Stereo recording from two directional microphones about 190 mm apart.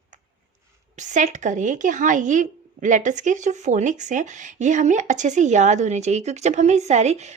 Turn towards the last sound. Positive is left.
turn(degrees=-35)  # may be behind; listen again after turning